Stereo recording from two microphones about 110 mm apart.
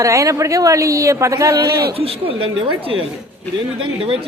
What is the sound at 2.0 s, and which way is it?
Speech, 60° right (ahead or behind).